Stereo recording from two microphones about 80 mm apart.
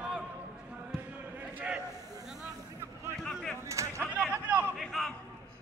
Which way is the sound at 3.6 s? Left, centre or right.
Right.